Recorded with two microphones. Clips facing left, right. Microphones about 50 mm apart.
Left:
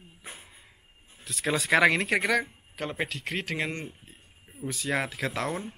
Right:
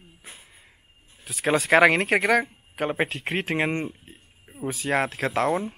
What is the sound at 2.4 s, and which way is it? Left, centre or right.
Speech, centre.